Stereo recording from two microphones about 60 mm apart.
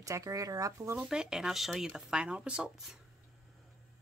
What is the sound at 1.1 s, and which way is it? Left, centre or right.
Speech, centre.